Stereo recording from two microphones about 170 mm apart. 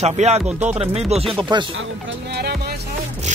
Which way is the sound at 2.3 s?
70° right (ahead or behind).